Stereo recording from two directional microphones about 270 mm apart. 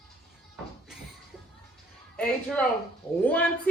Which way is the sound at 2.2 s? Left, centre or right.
Centre.